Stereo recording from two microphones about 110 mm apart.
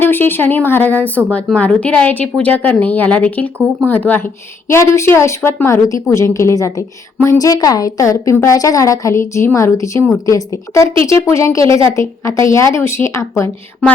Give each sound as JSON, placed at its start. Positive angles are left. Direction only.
{"t": 0.0, "sound": "a woman's voice", "side_deg": 20}